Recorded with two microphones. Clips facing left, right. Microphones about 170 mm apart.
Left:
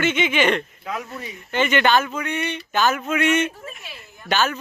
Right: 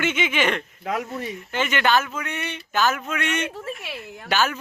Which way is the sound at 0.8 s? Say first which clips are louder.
Right 3 dB; 50° right (ahead or behind).